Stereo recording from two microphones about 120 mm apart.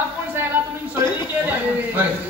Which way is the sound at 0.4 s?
20° right (ahead or behind).